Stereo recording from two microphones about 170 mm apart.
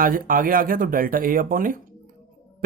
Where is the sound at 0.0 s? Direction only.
55° right (ahead or behind).